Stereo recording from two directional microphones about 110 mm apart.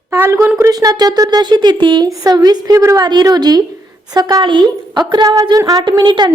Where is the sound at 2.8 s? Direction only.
25° right (ahead or behind).